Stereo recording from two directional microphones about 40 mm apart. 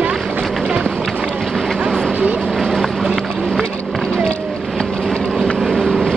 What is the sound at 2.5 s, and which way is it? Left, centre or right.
Run, centre.